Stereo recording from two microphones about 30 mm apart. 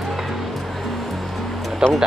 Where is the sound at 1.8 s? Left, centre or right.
Right.